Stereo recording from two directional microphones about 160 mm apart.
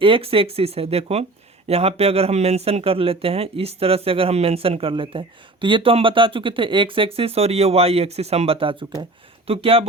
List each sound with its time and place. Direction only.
0.0 s speech: 35° right (ahead or behind)